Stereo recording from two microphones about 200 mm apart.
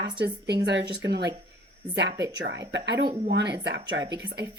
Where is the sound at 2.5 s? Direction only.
60° right (ahead or behind).